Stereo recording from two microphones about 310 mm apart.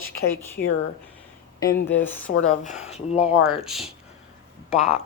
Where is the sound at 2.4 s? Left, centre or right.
Left.